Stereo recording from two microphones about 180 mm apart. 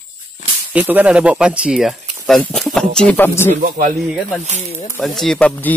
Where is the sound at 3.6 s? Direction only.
50° right (ahead or behind).